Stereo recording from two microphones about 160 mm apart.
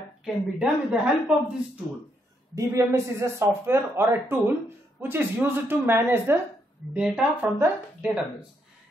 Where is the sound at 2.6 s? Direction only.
20° right (ahead or behind).